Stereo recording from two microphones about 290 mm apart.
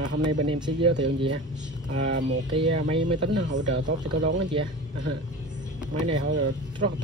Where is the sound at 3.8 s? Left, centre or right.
Right.